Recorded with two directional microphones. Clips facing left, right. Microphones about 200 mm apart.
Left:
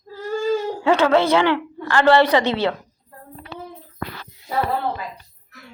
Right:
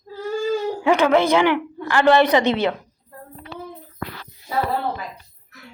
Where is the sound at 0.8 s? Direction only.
15° right (ahead or behind).